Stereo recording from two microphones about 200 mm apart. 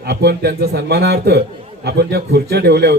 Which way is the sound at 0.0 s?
55° right (ahead or behind).